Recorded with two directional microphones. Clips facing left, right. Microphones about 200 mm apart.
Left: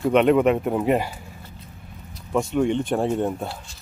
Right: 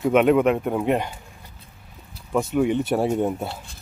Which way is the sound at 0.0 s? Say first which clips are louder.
Even; centre (ahead or behind).